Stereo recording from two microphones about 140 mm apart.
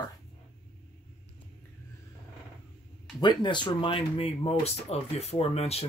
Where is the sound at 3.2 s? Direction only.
35° left (ahead or behind).